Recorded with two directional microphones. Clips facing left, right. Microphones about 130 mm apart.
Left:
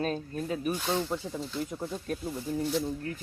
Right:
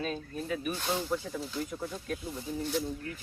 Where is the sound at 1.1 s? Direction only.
25° left (ahead or behind).